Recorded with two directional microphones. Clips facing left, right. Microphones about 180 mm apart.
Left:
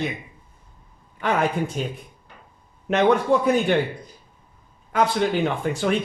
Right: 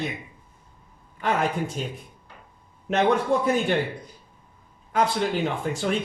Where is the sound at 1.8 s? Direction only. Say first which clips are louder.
Left 4 dB; 65° left (ahead or behind).